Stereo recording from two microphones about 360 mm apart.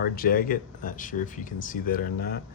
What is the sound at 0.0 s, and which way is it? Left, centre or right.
Speech, left.